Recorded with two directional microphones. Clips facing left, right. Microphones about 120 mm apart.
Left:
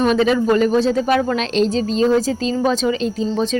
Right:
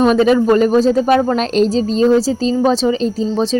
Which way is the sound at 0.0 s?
40° right (ahead or behind).